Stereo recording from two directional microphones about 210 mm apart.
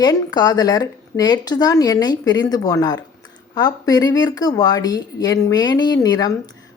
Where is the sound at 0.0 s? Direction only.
20° left (ahead or behind).